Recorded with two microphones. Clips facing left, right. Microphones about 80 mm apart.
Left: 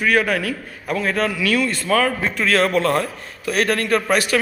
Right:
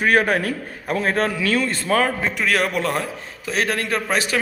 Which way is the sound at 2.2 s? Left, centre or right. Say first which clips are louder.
Left 2 dB; centre.